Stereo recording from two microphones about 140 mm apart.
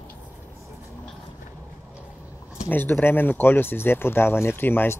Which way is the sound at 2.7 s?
15° left (ahead or behind).